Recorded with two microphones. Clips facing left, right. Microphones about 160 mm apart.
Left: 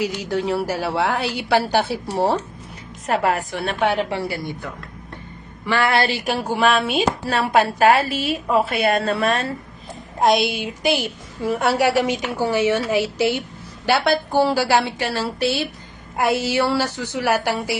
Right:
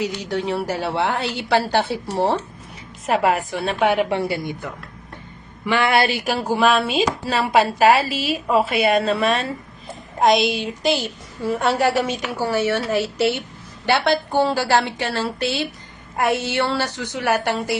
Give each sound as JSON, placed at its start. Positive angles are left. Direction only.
{"t": 0.0, "sound": "a woman's voice", "side_deg": 5}
{"t": 3.2, "sound": "a woman's voice", "side_deg": -10}
{"t": 6.1, "sound": "a woman's voice", "side_deg": 0}
{"t": 7.3, "sound": "a woman's voice", "side_deg": -10}